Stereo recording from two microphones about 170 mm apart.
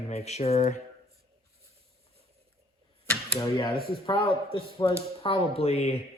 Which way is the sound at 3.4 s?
30° left (ahead or behind).